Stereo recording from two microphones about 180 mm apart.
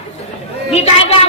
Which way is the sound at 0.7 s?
35° left (ahead or behind).